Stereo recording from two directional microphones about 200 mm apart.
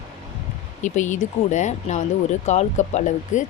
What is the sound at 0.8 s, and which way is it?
Speech, 40° left (ahead or behind).